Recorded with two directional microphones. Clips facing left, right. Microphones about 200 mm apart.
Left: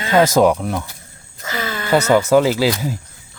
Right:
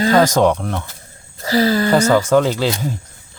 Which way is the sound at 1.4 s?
35° right (ahead or behind).